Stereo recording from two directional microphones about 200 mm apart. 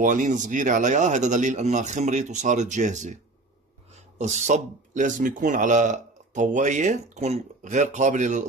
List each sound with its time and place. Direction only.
0.0 s speech: 40° right (ahead or behind)